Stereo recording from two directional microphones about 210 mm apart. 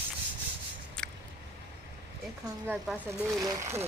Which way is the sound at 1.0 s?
5° left (ahead or behind).